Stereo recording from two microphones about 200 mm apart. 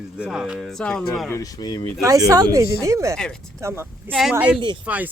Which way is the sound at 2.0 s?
15° right (ahead or behind).